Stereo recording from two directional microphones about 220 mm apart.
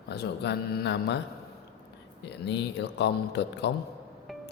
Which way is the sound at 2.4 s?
50° left (ahead or behind).